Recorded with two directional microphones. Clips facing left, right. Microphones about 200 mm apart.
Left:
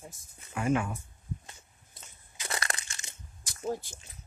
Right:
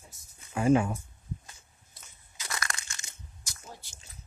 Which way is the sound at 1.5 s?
25° left (ahead or behind).